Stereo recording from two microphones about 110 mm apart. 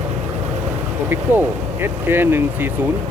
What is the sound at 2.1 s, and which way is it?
Speech, 20° right (ahead or behind).